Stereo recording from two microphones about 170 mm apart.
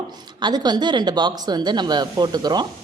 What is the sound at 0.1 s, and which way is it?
A woman's voice, 25° right (ahead or behind).